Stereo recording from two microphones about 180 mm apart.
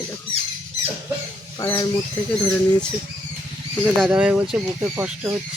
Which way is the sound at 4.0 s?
5° right (ahead or behind).